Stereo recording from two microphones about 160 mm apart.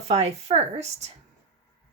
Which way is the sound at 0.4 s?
45° right (ahead or behind).